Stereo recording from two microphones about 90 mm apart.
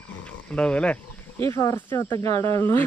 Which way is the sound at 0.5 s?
10° left (ahead or behind).